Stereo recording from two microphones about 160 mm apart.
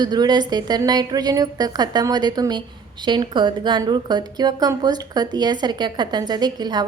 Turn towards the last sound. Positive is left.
turn(degrees=-25)  # may be behind; listen again after turning